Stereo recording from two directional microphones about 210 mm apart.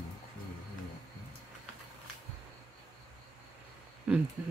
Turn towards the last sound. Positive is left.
turn(degrees=-5)  # may be behind; listen again after turning